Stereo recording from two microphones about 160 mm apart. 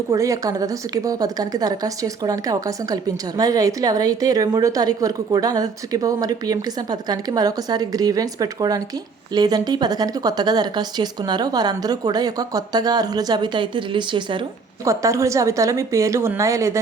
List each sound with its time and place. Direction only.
0.1 s a woman's voice: 20° right (ahead or behind)
14.8 s a woman's voice: 20° right (ahead or behind)